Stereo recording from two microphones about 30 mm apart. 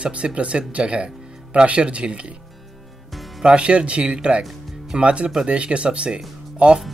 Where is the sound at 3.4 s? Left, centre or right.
Right.